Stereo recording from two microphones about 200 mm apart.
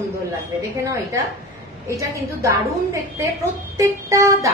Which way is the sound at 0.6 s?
15° right (ahead or behind).